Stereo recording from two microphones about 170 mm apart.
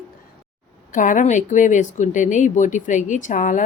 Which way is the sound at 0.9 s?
50° left (ahead or behind).